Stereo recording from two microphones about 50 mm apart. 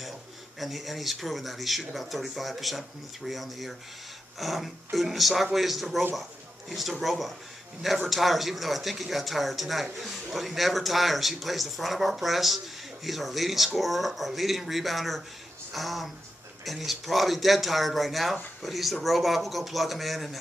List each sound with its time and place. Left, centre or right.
0.6 s a man's voice: centre